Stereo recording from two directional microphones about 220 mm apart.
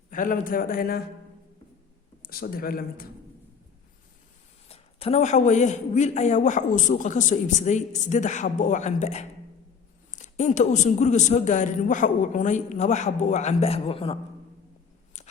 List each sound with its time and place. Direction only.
0.1 s a man's voice: 40° left (ahead or behind)
2.2 s a man's voice: 40° left (ahead or behind)
4.7 s a man's voice: 25° left (ahead or behind)
15.1 s a sound: 30° left (ahead or behind)